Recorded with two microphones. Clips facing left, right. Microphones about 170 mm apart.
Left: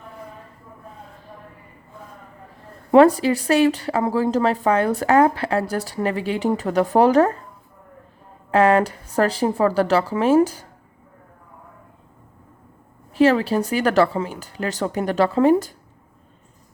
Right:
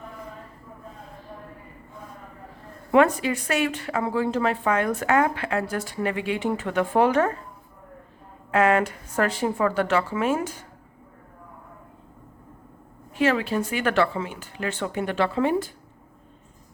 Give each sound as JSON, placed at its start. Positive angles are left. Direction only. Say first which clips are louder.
{"t": 2.9, "sound": "a woman's voice", "louder": "left 6 dB", "side_deg": 35}
{"t": 8.4, "sound": "a woman's voice", "louder": "left 4 dB", "side_deg": 35}
{"t": 13.1, "sound": "a woman's voice", "louder": "left 6 dB", "side_deg": 35}